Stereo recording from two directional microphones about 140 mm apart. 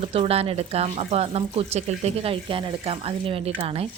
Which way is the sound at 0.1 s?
45° right (ahead or behind).